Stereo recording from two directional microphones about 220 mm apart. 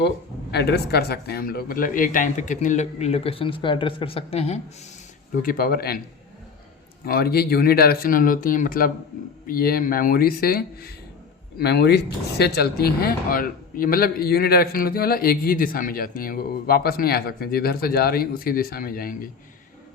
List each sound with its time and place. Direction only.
0.5 s speech: 50° left (ahead or behind); by 4.6 s 30° left (ahead or behind)
5.4 s speech: 40° left (ahead or behind)
7.0 s speech: 45° left (ahead or behind)